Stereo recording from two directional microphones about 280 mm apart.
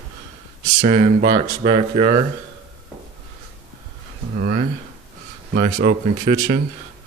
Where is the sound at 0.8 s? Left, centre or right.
Right.